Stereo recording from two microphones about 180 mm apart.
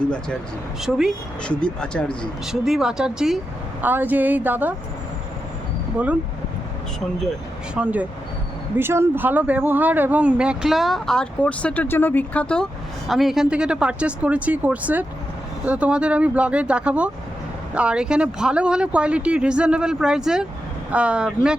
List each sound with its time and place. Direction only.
0.8 s speech: 5° right (ahead or behind)
7.8 s speech: 10° right (ahead or behind)